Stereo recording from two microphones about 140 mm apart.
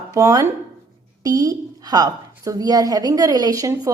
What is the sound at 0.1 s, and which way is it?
A woman's voice, 20° right (ahead or behind).